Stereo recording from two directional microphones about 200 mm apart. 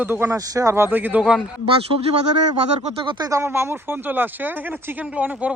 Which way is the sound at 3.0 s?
20° right (ahead or behind).